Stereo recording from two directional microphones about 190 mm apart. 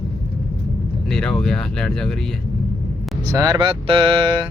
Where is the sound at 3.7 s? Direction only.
30° right (ahead or behind).